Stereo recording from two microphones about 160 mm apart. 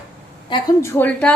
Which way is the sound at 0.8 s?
15° left (ahead or behind).